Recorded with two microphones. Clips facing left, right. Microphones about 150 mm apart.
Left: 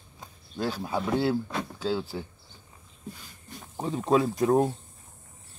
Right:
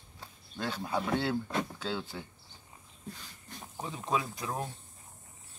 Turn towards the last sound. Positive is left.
turn(degrees=50)  # may be behind; listen again after turning